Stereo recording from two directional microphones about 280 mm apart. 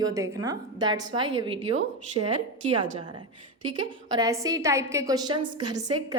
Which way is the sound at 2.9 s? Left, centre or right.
Centre.